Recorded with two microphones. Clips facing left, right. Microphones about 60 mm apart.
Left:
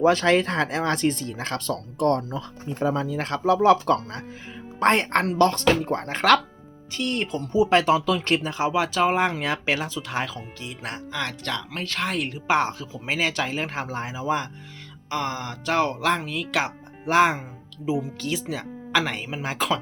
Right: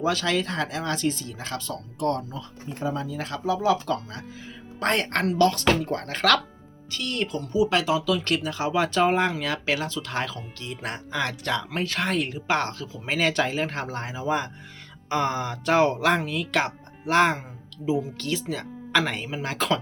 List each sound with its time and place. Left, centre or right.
0.0 s speech: left
4.8 s speech: left
8.2 s speech: left
8.7 s speech: centre
9.3 s speech: left
9.7 s speech: centre
11.9 s speech: centre
12.5 s speech: centre
13.1 s speech: centre